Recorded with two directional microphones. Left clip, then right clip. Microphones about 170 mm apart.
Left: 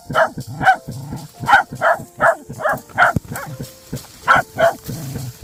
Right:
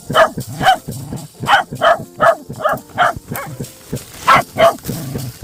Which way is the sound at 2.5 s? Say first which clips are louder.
Right 2 dB; 20° right (ahead or behind).